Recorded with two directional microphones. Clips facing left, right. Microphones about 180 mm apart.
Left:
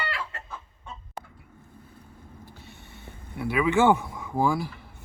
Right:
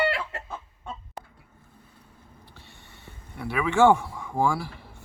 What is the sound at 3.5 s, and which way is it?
Speech, 15° left (ahead or behind).